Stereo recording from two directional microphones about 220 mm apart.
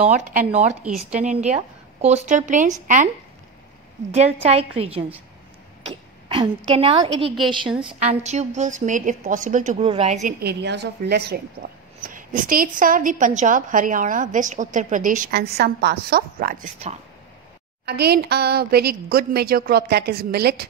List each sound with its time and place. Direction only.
0.0 s a woman's voice: 35° right (ahead or behind)
4.1 s a woman's voice: 30° right (ahead or behind)
10.4 s a woman's voice: 50° right (ahead or behind)